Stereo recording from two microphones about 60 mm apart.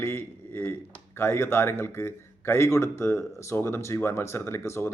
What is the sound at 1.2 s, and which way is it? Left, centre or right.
A man's voice, left.